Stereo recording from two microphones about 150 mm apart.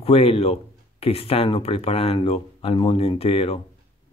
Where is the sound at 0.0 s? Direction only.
40° left (ahead or behind).